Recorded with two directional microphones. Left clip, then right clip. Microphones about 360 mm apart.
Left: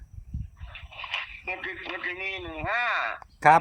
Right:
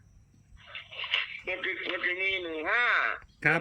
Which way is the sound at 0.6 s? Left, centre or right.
Centre.